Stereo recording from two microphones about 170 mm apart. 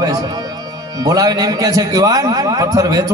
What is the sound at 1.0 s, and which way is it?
A man's voice, 20° right (ahead or behind).